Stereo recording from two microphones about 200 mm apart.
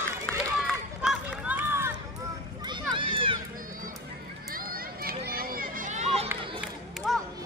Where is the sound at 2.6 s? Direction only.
25° right (ahead or behind).